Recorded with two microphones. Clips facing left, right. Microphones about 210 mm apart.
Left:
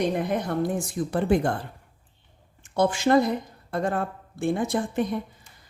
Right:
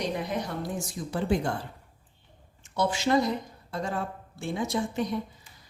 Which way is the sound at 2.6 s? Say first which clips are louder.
Left 5 dB; 50° left (ahead or behind).